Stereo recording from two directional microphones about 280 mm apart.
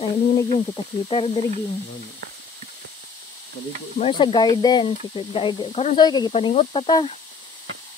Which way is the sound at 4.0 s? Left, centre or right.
Centre.